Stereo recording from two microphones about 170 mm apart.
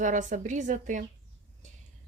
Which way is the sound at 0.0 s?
50° right (ahead or behind).